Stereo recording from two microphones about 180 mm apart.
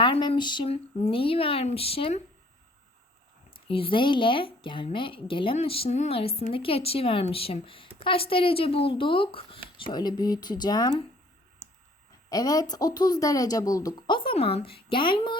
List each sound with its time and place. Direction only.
0.0 s speech: 25° left (ahead or behind)
3.7 s speech: 30° left (ahead or behind)
12.3 s speech: 20° left (ahead or behind)